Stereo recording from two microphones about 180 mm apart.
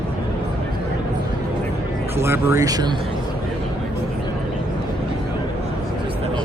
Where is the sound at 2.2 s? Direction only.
15° right (ahead or behind).